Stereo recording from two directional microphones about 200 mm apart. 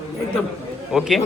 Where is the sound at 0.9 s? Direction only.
Centre (ahead or behind).